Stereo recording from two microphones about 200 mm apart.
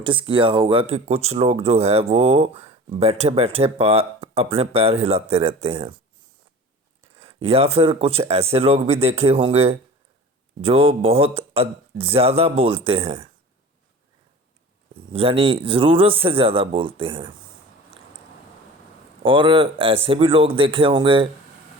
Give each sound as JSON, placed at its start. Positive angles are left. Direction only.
{"t": 0.0, "sound": "speech", "side_deg": -25}
{"t": 7.4, "sound": "speech", "side_deg": -30}
{"t": 15.1, "sound": "speech", "side_deg": -25}
{"t": 19.2, "sound": "speech", "side_deg": -25}